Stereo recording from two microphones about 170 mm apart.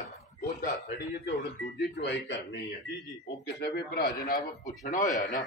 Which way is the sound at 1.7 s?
90° left.